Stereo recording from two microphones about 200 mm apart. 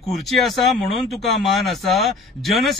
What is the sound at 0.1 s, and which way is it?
Speech, centre (ahead or behind).